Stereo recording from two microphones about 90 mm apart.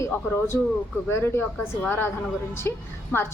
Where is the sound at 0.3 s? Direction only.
25° left (ahead or behind).